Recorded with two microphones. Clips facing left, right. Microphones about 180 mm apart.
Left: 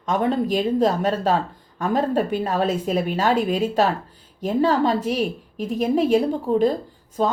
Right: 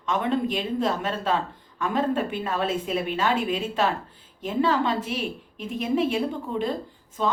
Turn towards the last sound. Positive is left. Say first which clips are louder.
# left 4 dB
turn(degrees=40)  # may be behind; listen again after turning